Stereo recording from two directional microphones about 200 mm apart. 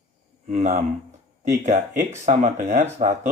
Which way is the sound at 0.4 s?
35° right (ahead or behind).